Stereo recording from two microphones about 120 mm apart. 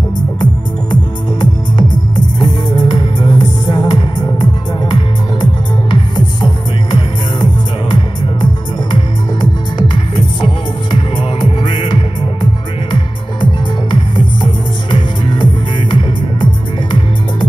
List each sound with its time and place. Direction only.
1.4 s music: 40° left (ahead or behind)
8.9 s music: 40° left (ahead or behind)